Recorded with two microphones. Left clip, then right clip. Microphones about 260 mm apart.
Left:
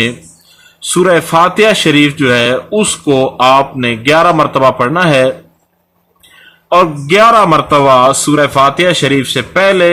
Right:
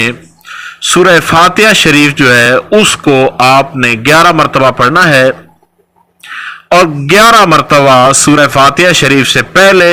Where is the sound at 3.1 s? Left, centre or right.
Right.